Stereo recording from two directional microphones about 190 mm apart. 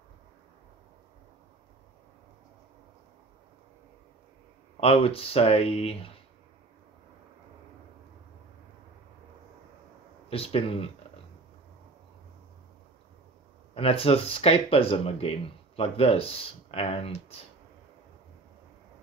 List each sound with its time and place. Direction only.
4.7 s speech: 30° left (ahead or behind)
10.3 s speech: 30° left (ahead or behind)
13.7 s speech: 30° left (ahead or behind)